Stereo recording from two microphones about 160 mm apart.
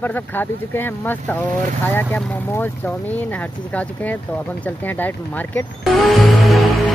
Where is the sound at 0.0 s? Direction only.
10° left (ahead or behind).